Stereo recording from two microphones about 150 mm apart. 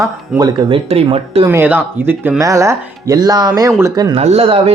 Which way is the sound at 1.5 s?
15° right (ahead or behind).